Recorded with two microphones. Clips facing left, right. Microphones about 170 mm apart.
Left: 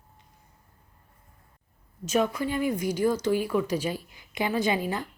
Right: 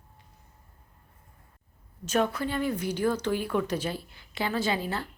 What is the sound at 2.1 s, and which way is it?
Speech, 10° left (ahead or behind).